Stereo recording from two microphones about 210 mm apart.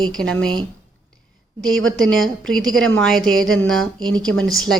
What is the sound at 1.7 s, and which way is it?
Speech, 70° right (ahead or behind).